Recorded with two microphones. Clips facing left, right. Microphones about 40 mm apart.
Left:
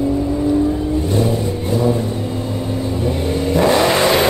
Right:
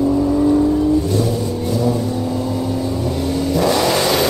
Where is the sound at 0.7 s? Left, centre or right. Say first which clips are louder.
Right 2 dB; left.